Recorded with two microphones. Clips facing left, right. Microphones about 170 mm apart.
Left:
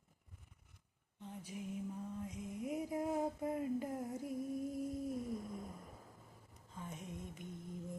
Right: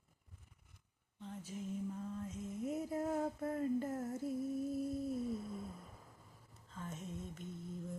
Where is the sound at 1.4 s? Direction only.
15° left (ahead or behind).